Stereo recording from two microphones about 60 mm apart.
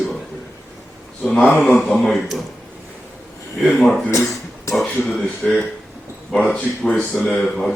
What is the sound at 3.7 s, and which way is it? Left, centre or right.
Speech, centre.